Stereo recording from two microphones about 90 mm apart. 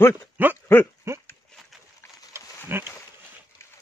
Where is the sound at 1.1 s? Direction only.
30° right (ahead or behind).